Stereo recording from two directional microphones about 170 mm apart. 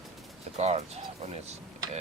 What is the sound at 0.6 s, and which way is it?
Speech, 40° right (ahead or behind).